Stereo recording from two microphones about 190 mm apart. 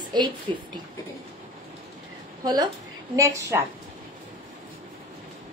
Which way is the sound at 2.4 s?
20° right (ahead or behind).